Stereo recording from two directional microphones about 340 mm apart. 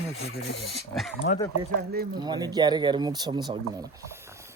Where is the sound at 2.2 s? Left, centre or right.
Centre.